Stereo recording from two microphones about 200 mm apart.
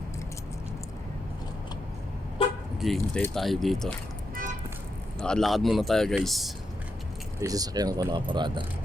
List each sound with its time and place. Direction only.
2.8 s speech: centre (ahead or behind)
5.2 s speech: 5° left (ahead or behind)
7.4 s speech: 20° right (ahead or behind)